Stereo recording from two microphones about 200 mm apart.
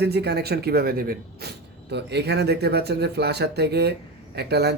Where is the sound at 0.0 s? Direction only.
55° right (ahead or behind).